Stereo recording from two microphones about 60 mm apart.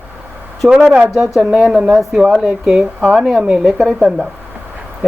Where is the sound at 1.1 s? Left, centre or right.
Centre.